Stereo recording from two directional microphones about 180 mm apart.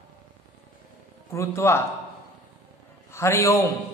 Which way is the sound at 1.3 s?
15° left (ahead or behind).